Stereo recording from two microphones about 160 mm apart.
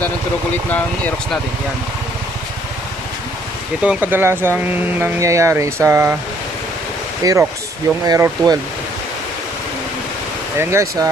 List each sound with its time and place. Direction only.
0.7 s speech: 10° left (ahead or behind)
3.8 s speech: 10° right (ahead or behind)
7.2 s speech: 20° right (ahead or behind)
10.6 s speech: 15° right (ahead or behind)